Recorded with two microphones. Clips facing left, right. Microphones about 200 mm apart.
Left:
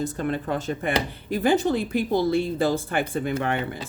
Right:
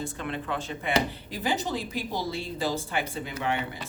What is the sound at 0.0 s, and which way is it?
Speech, 40° left (ahead or behind).